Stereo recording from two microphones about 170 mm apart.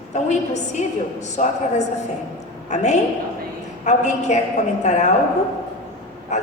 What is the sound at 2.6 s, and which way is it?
A woman's voice, 45° left (ahead or behind).